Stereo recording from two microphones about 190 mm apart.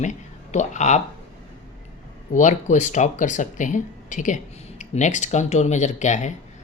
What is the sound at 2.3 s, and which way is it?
A woman's voice, 40° left (ahead or behind).